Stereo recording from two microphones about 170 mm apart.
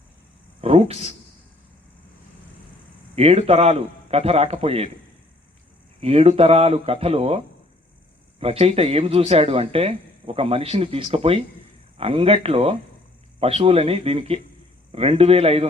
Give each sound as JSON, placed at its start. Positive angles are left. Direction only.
{"t": 0.6, "sound": "a sound", "side_deg": -35}
{"t": 3.2, "sound": "speech", "side_deg": -35}
{"t": 6.0, "sound": "speech", "side_deg": -35}